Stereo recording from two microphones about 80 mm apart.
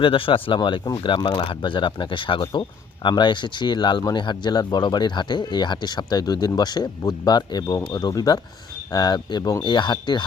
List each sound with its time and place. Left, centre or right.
0.0 s speech: left
0.9 s speech: left
9.6 s speech: left